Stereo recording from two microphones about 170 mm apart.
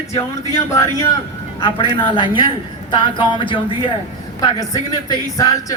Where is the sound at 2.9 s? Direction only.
30° left (ahead or behind).